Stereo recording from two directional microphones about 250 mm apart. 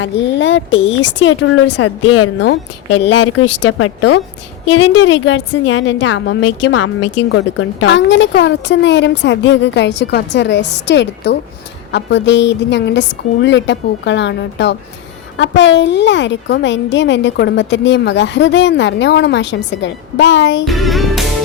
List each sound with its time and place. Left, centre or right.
0.0 s a woman's voice: left
3.6 s a woman's voice: left
7.3 s a woman's voice: left
20.7 s music: centre